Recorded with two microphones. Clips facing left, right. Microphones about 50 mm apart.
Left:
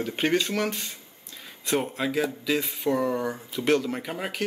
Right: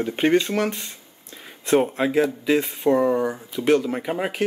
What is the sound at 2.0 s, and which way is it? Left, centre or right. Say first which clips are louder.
Speech: right 6 dB; right.